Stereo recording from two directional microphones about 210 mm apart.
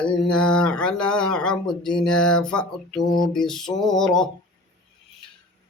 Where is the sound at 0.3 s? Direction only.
5° left (ahead or behind).